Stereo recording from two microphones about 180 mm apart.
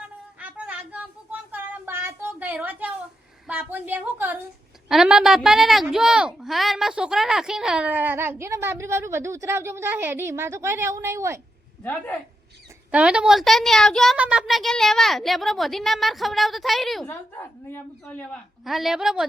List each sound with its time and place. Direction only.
0.3 s a sound: 5° right (ahead or behind)
3.4 s a woman's voice: 10° right (ahead or behind)
11.8 s a woman's voice: 10° left (ahead or behind)
12.9 s a woman's voice: 5° right (ahead or behind)
17.1 s a woman's voice: 10° left (ahead or behind)